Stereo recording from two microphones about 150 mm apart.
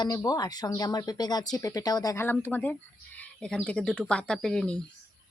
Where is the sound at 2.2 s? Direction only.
15° left (ahead or behind).